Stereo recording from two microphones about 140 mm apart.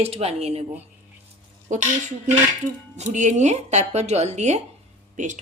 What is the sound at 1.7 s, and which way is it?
Speech, 60° right (ahead or behind).